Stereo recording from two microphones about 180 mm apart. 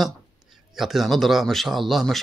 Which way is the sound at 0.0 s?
Centre (ahead or behind).